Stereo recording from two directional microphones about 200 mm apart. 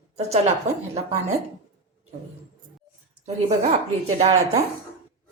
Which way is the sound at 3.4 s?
30° right (ahead or behind).